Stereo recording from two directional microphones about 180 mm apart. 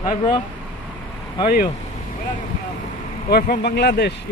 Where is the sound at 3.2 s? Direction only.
60° left (ahead or behind).